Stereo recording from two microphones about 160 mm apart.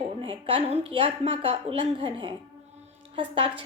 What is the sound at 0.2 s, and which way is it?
A woman's voice, 35° right (ahead or behind).